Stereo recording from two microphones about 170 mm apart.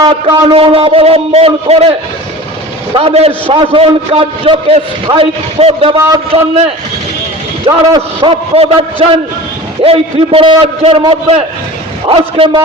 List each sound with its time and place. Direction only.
0.0 s a man's voice: 30° right (ahead or behind)
7.7 s a man's voice: 30° right (ahead or behind)
9.8 s a man's voice: 35° right (ahead or behind)